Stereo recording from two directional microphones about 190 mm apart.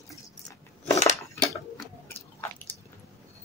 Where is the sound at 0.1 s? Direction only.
15° left (ahead or behind).